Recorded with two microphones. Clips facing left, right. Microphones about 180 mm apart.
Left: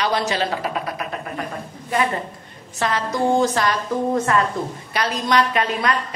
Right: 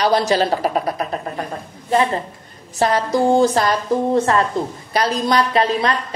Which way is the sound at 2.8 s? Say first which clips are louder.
Right 5 dB; 35° right (ahead or behind).